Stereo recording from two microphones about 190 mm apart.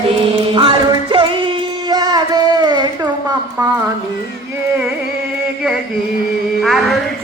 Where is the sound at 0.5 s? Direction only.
25° right (ahead or behind).